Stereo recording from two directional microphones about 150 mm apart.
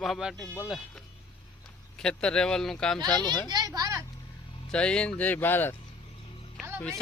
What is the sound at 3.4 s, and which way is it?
Speech, 25° right (ahead or behind).